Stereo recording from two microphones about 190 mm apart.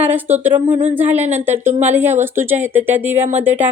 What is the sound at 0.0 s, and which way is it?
Speech, 10° right (ahead or behind).